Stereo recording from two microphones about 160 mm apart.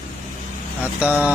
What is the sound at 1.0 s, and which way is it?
Speech, 10° right (ahead or behind).